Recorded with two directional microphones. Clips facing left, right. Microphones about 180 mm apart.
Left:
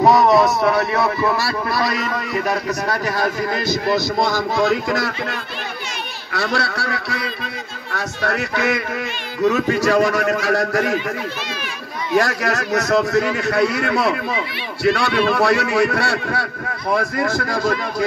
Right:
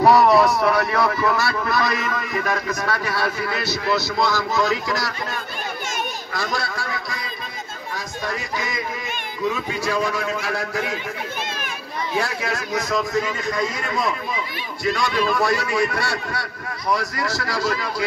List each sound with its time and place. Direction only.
0.0 s speech: 20° left (ahead or behind); by 5.1 s 55° left (ahead or behind)
6.3 s a man's voice: 65° left (ahead or behind)
12.2 s a man's voice: 75° left (ahead or behind); by 18.0 s 50° left (ahead or behind)